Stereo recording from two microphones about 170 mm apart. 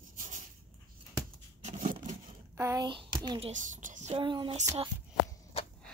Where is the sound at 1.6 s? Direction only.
45° right (ahead or behind).